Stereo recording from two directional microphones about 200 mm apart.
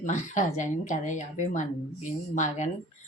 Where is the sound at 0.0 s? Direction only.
35° left (ahead or behind).